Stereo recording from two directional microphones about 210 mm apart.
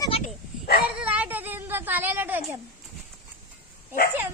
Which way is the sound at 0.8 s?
5° right (ahead or behind).